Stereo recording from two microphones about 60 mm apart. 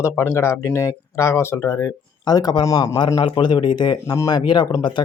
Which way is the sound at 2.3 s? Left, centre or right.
Left.